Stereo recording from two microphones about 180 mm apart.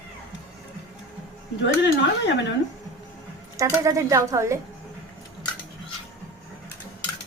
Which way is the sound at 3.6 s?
15° right (ahead or behind).